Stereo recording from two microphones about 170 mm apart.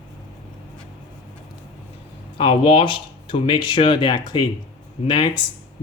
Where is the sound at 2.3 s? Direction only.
35° left (ahead or behind).